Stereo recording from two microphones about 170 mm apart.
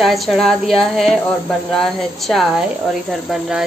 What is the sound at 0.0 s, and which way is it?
Speech, centre (ahead or behind).